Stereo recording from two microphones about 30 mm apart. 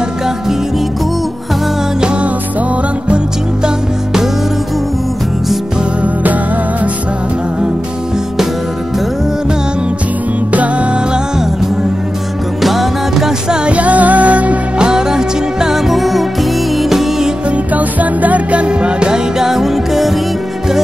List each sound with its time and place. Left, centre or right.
3.6 s music: centre
10.5 s music: right
12.6 s music: centre
13.7 s music: right
14.9 s music: centre
15.9 s music: centre
17.7 s music: right
18.7 s music: right
19.3 s music: centre